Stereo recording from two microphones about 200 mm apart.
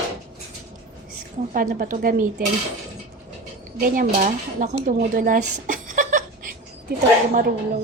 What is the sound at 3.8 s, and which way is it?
Speech, 45° right (ahead or behind).